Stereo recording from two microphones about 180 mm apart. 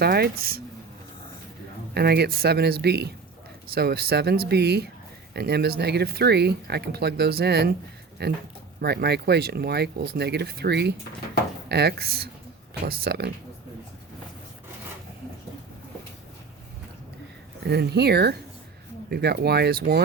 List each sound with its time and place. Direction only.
0.0 s speech: 60° right (ahead or behind)
1.9 s speech: 60° right (ahead or behind)
17.7 s speech: 65° right (ahead or behind)